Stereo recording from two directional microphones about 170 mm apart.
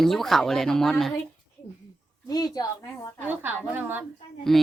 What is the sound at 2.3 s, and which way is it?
Speech, 20° left (ahead or behind).